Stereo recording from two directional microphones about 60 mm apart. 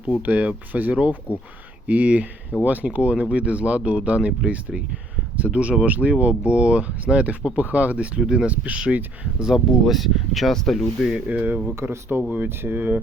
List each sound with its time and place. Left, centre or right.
0.2 s speech: right
9.5 s speech: centre
11.3 s speech: right
11.7 s speech: right